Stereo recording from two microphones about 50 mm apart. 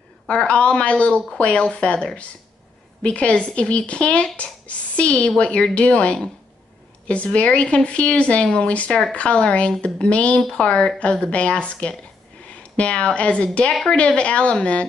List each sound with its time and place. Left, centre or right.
0.3 s a woman's voice: left